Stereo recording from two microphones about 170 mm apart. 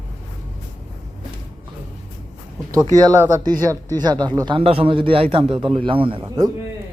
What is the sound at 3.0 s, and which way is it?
Speech, 20° right (ahead or behind).